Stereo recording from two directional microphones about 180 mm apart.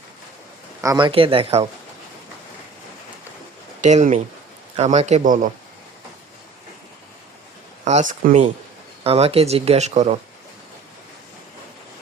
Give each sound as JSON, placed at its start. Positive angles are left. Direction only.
{"t": 0.8, "sound": "speech", "side_deg": -20}
{"t": 3.8, "sound": "speech", "side_deg": -40}
{"t": 7.9, "sound": "speech", "side_deg": -40}